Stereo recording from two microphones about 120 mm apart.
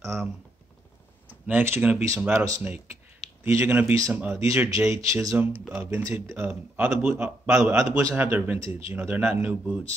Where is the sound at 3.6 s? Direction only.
15° right (ahead or behind).